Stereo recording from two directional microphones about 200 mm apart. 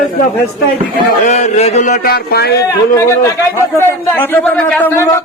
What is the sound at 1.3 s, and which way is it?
Mantra, 35° left (ahead or behind).